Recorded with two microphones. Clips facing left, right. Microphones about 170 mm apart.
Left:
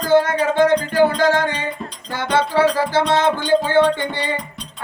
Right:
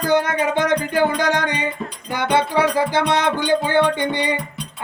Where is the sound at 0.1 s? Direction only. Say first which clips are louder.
Left 3 dB; 20° right (ahead or behind).